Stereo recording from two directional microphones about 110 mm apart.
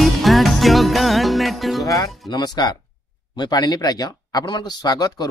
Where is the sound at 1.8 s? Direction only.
30° left (ahead or behind).